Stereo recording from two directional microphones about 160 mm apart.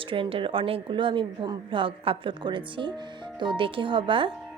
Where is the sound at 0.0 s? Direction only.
35° right (ahead or behind).